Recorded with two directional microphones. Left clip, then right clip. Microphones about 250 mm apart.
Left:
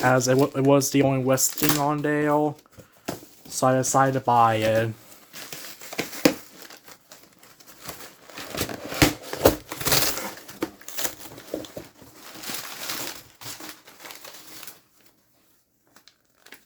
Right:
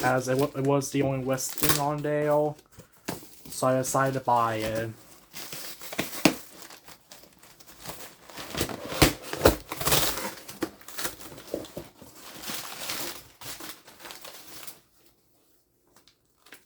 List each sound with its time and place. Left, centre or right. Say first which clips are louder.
0.0 s speech: left 5 dB; left
3.5 s speech: left 4 dB; left
6.0 s crumpling: left 3 dB; centre
8.5 s a sound: left 1 dB; centre